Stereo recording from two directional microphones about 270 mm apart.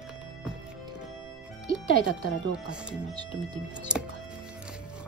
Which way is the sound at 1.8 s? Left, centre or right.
Left.